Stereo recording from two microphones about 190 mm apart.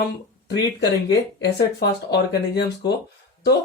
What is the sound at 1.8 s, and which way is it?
Speech, 60° left (ahead or behind).